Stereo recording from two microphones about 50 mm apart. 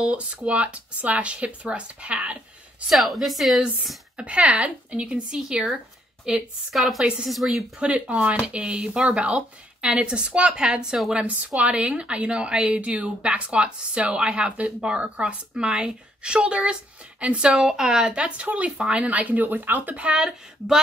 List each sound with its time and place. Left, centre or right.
0.0 s a woman's voice: right
2.9 s a woman's voice: centre
4.2 s a woman's voice: right
6.7 s a woman's voice: centre
7.9 s a woman's voice: right